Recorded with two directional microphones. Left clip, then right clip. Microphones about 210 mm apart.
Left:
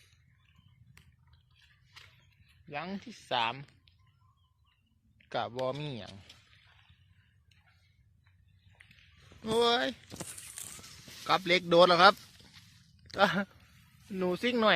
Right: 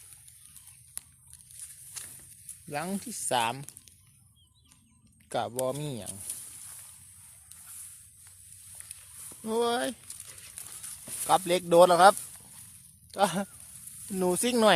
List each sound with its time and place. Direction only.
2.6 s speech: 35° right (ahead or behind)
5.3 s speech: 15° right (ahead or behind)
9.5 s speech: 15° right (ahead or behind)
11.3 s speech: 10° right (ahead or behind)
14.2 s speech: 30° right (ahead or behind)